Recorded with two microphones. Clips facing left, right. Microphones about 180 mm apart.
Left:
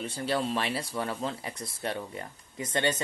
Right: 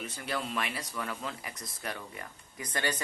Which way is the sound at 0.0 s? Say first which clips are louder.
Left 6 dB; 30° left (ahead or behind).